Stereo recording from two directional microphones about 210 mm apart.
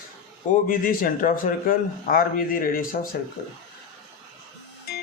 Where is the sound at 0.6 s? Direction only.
40° left (ahead or behind).